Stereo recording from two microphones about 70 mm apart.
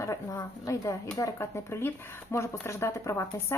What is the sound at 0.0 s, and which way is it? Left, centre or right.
A woman's voice, left.